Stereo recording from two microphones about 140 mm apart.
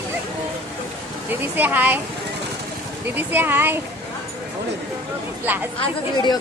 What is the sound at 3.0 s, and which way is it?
Speech, 15° right (ahead or behind).